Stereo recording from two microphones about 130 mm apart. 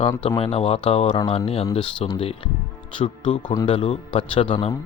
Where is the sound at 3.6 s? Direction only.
40° left (ahead or behind).